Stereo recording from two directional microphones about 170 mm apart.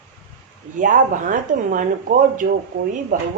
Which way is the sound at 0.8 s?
50° right (ahead or behind).